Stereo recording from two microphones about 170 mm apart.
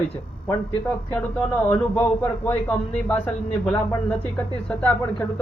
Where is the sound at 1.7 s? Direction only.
15° left (ahead or behind).